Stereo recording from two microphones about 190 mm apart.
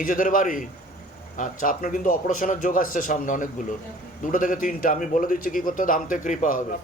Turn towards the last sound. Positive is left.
turn(degrees=40)  # may be behind; listen again after turning